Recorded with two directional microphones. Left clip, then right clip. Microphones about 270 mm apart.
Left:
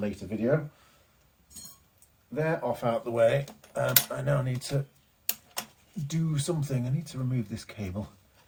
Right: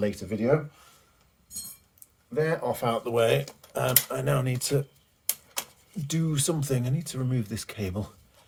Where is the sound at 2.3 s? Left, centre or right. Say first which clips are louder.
Right 2 dB; centre.